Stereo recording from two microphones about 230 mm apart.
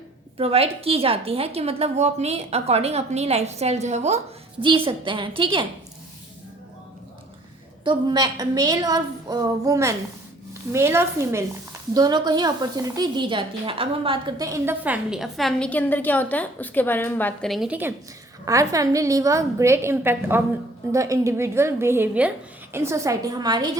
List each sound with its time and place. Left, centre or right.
0.3 s a woman's voice: right
7.9 s a woman's voice: centre